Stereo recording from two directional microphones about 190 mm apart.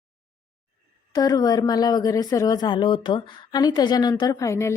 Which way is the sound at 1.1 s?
20° left (ahead or behind).